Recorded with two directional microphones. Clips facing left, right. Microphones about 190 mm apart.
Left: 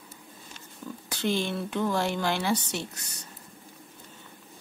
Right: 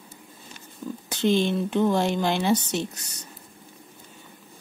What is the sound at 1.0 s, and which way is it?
Speech, 20° right (ahead or behind).